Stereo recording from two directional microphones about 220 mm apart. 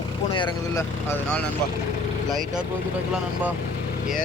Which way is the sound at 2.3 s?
Centre (ahead or behind).